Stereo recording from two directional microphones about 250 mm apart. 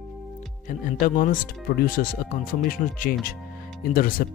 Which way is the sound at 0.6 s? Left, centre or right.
Left.